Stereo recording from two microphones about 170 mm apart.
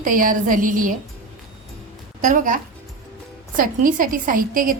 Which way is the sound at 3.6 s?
55° right (ahead or behind).